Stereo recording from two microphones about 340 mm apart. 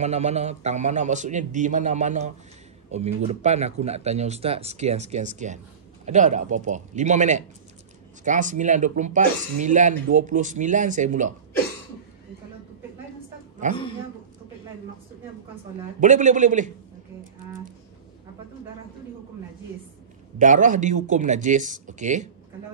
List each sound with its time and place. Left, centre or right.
0.0 s speech: centre
13.6 s speech: right
16.0 s speech: right
20.3 s speech: right